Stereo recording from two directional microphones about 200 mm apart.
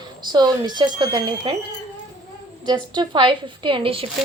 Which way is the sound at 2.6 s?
20° right (ahead or behind).